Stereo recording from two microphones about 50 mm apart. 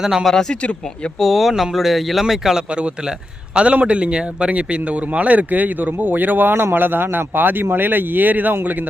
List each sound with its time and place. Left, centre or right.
0.0 s speech: centre
0.3 s speech: centre
0.6 s speech: left
1.2 s speech: centre
2.6 s a man's voice: right